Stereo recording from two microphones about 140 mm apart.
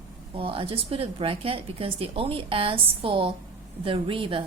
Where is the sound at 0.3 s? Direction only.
40° right (ahead or behind).